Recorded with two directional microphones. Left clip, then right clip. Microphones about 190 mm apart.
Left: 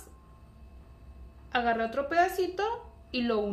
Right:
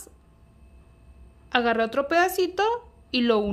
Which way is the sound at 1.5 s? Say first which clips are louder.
Right 5 dB; 50° right (ahead or behind).